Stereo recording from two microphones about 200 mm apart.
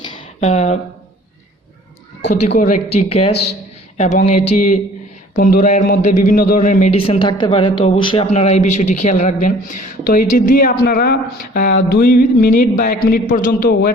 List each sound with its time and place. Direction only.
0.3 s speech: 35° left (ahead or behind)
2.6 s speech: 35° left (ahead or behind)
6.9 s speech: 25° left (ahead or behind); by 13.9 s 45° left (ahead or behind)